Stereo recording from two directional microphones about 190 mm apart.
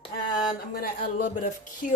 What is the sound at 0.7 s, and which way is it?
A woman's voice, 50° left (ahead or behind).